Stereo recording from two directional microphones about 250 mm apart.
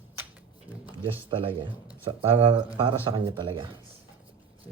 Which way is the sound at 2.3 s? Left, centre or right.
Centre.